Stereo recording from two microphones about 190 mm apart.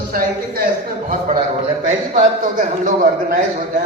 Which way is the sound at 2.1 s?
40° right (ahead or behind).